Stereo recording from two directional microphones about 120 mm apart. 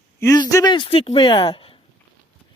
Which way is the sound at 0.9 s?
55° left (ahead or behind).